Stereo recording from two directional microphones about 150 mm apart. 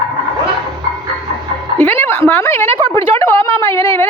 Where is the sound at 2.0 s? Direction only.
15° left (ahead or behind).